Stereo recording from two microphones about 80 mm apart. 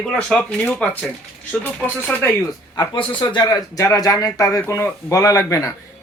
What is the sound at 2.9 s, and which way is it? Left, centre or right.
Speech, left.